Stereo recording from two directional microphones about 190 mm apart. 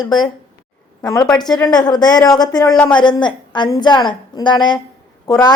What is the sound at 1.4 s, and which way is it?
A woman's voice, 20° left (ahead or behind).